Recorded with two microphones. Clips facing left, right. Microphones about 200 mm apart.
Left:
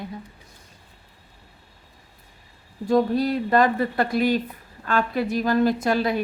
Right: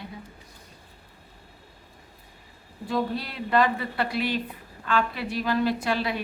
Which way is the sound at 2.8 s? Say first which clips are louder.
Left 8 dB; 45° left (ahead or behind).